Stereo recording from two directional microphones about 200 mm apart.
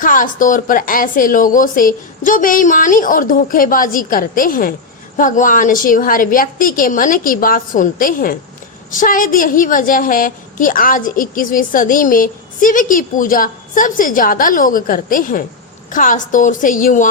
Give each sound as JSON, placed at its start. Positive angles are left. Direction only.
{"t": 0.0, "sound": "a woman's voice", "side_deg": 40}